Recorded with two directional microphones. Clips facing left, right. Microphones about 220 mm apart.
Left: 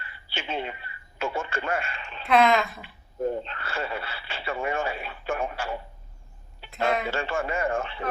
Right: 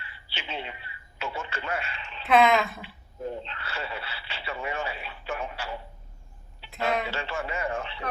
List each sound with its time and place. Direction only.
0.0 s speech: 50° left (ahead or behind)
2.2 s a woman's voice: centre (ahead or behind)
3.2 s speech: 50° left (ahead or behind)
6.6 s a sound: 50° left (ahead or behind)
7.1 s speech: 50° left (ahead or behind)